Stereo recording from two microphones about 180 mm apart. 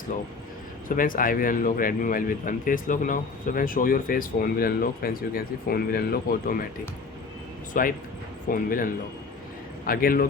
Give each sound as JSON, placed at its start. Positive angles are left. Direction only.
{"t": 0.9, "sound": "speech", "side_deg": 50}
{"t": 7.7, "sound": "speech", "side_deg": 50}